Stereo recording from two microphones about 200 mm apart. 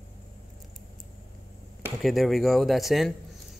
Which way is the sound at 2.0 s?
Centre (ahead or behind).